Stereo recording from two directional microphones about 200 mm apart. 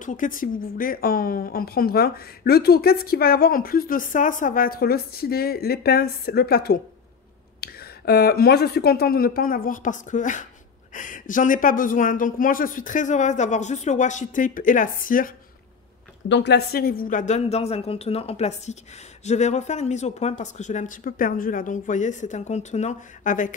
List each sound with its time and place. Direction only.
0.0 s speech: 40° left (ahead or behind)
16.3 s speech: 60° left (ahead or behind); by 23.5 s 40° left (ahead or behind)